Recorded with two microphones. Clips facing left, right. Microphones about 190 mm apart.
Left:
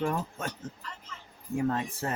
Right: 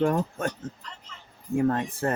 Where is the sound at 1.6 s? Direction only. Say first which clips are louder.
Right 5 dB; 50° right (ahead or behind).